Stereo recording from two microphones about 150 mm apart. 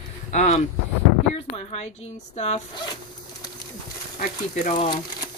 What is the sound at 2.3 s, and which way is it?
Speech, 45° left (ahead or behind).